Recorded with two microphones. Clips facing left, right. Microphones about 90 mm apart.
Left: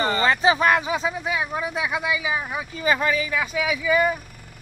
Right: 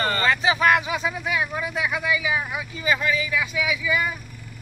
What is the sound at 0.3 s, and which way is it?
Speech, 35° left (ahead or behind).